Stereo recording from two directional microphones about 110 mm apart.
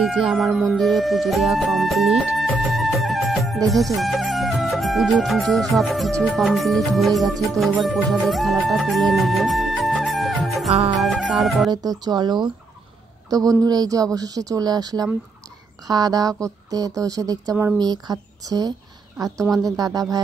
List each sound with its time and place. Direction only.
0.0 s music: 5° right (ahead or behind)
3.6 s speech: centre (ahead or behind)
5.8 s music: centre (ahead or behind)
11.7 s speech: 40° right (ahead or behind)